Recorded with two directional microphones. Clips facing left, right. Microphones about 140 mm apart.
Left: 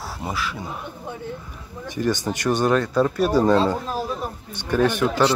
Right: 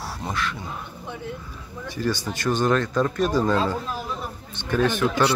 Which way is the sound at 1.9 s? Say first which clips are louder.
Left 3 dB; 15° left (ahead or behind).